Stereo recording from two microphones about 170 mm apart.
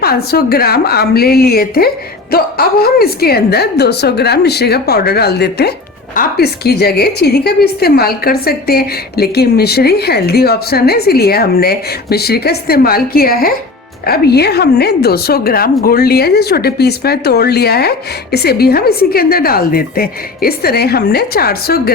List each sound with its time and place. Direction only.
0.0 s a woman's voice: 65° left (ahead or behind)